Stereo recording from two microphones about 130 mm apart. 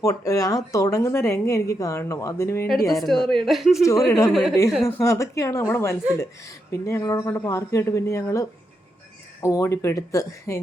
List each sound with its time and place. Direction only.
0.0 s speech: 25° left (ahead or behind)
2.6 s a woman's voice: centre (ahead or behind)
3.8 s speech: 25° left (ahead or behind)
4.3 s a woman's voice: centre (ahead or behind)
4.9 s speech: 25° left (ahead or behind)